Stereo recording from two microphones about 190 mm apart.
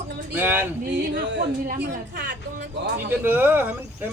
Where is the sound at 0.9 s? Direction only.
70° right (ahead or behind).